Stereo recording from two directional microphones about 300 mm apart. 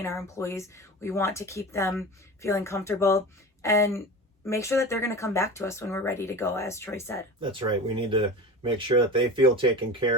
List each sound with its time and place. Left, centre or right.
0.0 s speech: centre
7.4 s speech: centre